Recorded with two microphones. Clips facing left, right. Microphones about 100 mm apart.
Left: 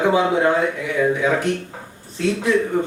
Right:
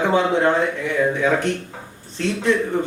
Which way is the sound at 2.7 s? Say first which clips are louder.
Left 1 dB; 5° left (ahead or behind).